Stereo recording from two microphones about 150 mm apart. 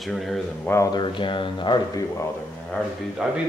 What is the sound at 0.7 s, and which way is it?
Speech, 25° left (ahead or behind).